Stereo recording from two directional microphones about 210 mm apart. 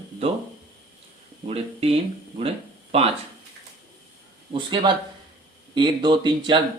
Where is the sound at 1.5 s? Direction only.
30° right (ahead or behind).